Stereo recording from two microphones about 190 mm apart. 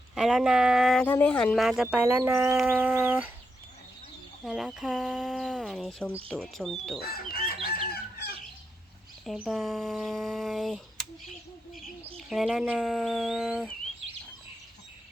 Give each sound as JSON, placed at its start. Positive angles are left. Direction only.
{"t": 0.1, "sound": "speech", "side_deg": 0}
{"t": 4.4, "sound": "speech", "side_deg": 0}
{"t": 7.0, "sound": "chicken", "side_deg": 55}
{"t": 9.2, "sound": "speech", "side_deg": 0}
{"t": 12.1, "sound": "speech", "side_deg": 0}